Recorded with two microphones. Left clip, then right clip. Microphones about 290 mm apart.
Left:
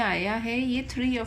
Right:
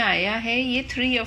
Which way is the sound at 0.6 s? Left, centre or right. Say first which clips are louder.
Right 5 dB; left.